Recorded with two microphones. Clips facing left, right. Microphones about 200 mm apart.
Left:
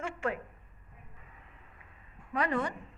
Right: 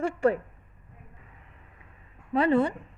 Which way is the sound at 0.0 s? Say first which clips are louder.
Right 10 dB; 35° right (ahead or behind).